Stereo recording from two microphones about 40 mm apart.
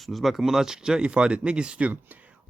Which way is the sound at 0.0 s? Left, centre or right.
Centre.